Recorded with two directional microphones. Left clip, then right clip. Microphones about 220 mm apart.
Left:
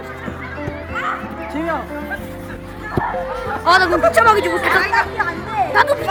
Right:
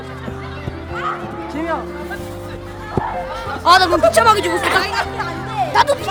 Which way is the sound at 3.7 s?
55° right (ahead or behind).